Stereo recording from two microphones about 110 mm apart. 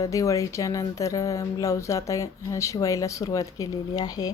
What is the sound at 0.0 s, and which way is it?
Speech, 30° left (ahead or behind).